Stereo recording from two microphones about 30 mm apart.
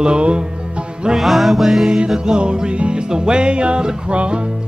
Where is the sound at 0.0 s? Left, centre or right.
Right.